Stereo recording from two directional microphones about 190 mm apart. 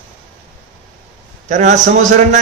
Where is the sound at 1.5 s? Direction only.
40° right (ahead or behind).